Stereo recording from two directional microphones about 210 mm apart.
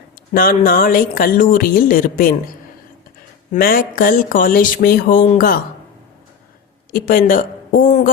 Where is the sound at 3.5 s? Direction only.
45° left (ahead or behind).